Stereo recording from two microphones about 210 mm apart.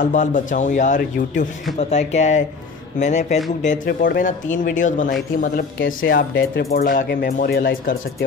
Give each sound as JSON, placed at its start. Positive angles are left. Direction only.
{"t": 0.0, "sound": "a man's voice", "side_deg": 35}
{"t": 6.3, "sound": "speech", "side_deg": 50}